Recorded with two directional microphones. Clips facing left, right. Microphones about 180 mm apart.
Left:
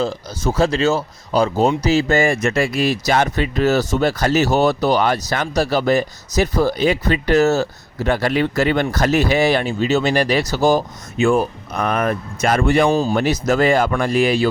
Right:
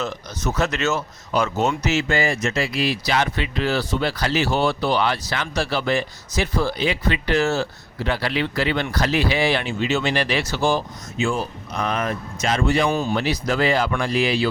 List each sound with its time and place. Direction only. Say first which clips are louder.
0.0 s speech: left 5 dB; 30° left (ahead or behind)
11.2 s speech: left 8 dB; 60° left (ahead or behind)